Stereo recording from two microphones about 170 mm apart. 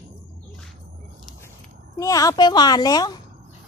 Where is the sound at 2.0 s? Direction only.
20° left (ahead or behind).